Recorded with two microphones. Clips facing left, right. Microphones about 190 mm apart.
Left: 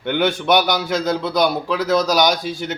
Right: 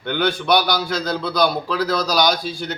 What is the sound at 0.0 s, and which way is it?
A man's voice, 20° left (ahead or behind).